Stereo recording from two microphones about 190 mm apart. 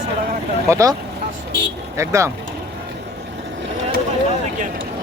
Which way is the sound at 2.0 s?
15° right (ahead or behind).